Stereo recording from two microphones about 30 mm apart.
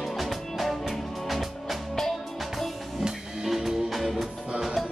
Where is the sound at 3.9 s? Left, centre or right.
Centre.